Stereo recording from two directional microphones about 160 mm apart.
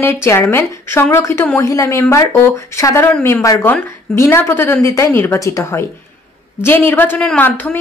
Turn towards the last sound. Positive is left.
turn(degrees=10)  # may be behind; listen again after turning